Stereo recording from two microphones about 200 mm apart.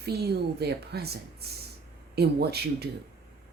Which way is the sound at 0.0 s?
55° right (ahead or behind).